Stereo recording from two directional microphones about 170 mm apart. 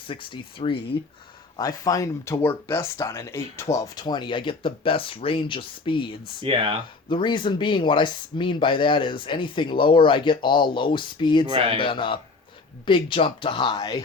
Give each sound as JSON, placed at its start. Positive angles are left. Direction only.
{"t": 0.1, "sound": "speech", "side_deg": 30}
{"t": 6.4, "sound": "speech", "side_deg": -35}
{"t": 7.1, "sound": "speech", "side_deg": 30}
{"t": 11.4, "sound": "speech", "side_deg": -30}
{"t": 11.8, "sound": "speech", "side_deg": 30}